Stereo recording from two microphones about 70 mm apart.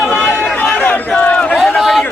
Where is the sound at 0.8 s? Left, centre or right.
Left.